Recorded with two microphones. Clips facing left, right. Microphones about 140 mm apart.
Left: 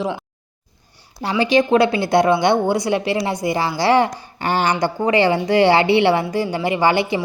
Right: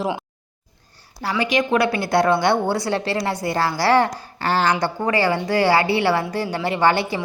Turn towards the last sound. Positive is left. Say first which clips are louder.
# left 2 dB
turn(degrees=15)  # may be behind; listen again after turning